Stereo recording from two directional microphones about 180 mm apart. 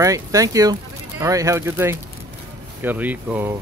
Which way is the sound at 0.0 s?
20° right (ahead or behind).